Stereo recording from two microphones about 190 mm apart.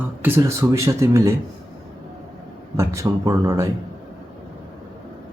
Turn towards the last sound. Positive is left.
turn(degrees=-15)  # may be behind; listen again after turning